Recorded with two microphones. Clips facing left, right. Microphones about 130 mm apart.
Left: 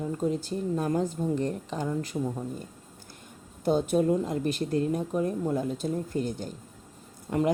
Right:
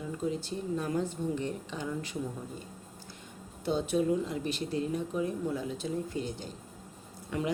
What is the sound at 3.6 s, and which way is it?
A woman's voice, 45° left (ahead or behind).